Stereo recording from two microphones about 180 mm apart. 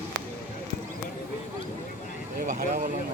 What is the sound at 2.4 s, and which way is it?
Speech, 45° right (ahead or behind).